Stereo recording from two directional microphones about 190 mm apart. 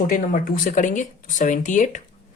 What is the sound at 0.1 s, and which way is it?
Speech, 45° left (ahead or behind).